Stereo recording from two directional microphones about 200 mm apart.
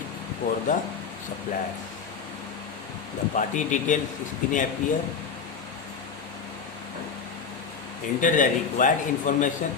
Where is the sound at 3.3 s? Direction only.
40° left (ahead or behind).